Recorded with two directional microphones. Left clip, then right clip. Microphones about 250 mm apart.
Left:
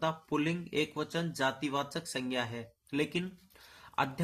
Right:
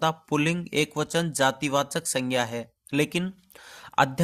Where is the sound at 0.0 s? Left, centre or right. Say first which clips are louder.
Right 8 dB; right.